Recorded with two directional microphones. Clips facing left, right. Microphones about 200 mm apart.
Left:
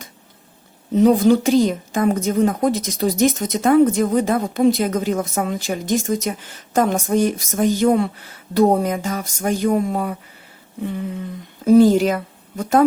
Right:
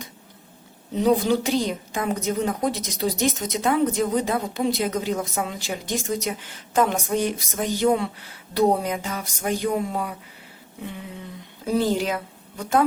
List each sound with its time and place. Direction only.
1.0 s a woman's voice: 50° left (ahead or behind)
11.6 s a woman's voice: 45° left (ahead or behind)